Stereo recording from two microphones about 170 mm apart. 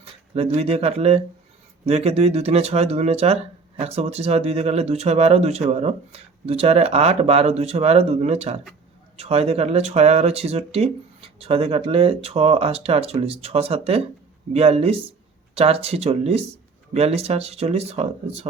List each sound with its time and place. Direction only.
0.0 s speech: 35° right (ahead or behind)